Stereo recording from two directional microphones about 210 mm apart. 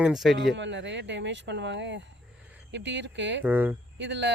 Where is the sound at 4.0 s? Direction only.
60° right (ahead or behind).